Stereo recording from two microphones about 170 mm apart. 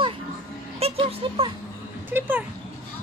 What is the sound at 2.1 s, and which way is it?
Speech, 10° right (ahead or behind).